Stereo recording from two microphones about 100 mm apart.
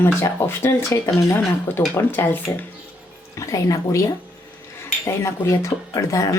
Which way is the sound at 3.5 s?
35° left (ahead or behind).